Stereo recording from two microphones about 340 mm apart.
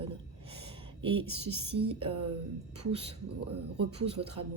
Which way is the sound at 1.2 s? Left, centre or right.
Centre.